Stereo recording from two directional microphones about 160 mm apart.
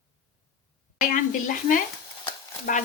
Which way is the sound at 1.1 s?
55° left (ahead or behind).